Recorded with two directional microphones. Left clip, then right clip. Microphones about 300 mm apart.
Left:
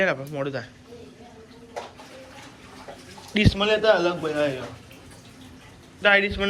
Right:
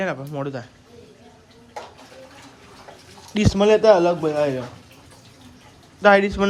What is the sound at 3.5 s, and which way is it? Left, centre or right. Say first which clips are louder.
A man's voice: right 7 dB; right.